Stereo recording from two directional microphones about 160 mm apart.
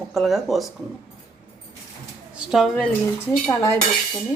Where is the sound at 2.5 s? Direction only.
Centre (ahead or behind).